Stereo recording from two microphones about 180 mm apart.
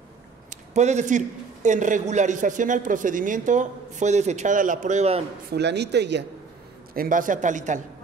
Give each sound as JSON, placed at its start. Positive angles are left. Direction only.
{"t": 0.5, "sound": "a man's voice", "side_deg": -40}
{"t": 5.5, "sound": "speech", "side_deg": -70}
{"t": 6.9, "sound": "a man's voice", "side_deg": -50}